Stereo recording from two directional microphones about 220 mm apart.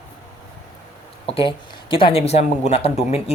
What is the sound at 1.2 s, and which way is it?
Speech, 25° left (ahead or behind).